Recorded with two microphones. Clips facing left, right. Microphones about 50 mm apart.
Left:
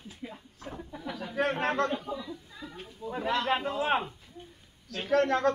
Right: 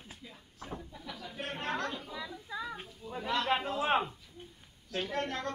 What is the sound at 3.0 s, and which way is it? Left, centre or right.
Snake, centre.